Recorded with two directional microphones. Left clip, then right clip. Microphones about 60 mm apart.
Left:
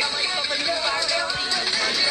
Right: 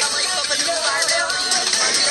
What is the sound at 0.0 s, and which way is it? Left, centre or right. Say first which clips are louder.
Music: right 3 dB; right.